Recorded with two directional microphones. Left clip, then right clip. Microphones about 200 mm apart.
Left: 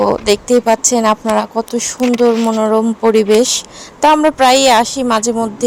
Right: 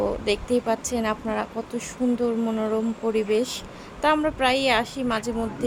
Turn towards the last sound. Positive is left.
turn(degrees=35)  # may be behind; listen again after turning